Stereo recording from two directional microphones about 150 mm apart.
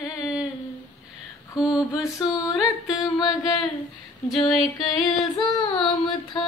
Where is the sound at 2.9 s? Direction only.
25° left (ahead or behind).